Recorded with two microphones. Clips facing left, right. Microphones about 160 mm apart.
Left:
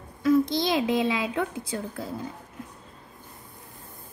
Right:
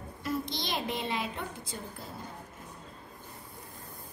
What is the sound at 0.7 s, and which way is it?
A woman's voice, 90° left.